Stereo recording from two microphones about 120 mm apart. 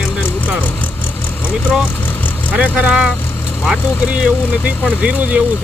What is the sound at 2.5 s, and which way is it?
Speech, 10° right (ahead or behind).